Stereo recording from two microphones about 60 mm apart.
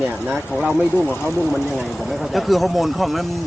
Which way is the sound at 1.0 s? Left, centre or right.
Left.